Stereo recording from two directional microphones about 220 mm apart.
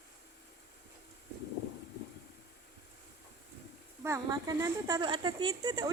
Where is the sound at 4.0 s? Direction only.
15° right (ahead or behind).